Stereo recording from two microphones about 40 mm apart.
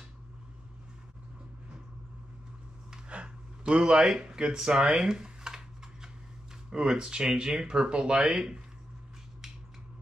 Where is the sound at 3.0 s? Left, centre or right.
Right.